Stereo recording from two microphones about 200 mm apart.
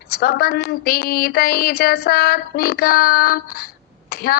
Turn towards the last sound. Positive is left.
turn(degrees=50)  # may be behind; listen again after turning